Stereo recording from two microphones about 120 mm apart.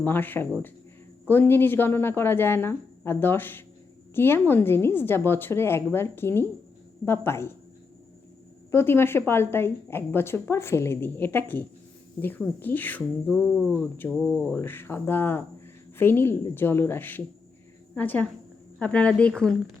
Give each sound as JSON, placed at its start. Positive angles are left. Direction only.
{"t": 0.0, "sound": "a woman's voice", "side_deg": 15}
{"t": 8.7, "sound": "a woman's voice", "side_deg": 20}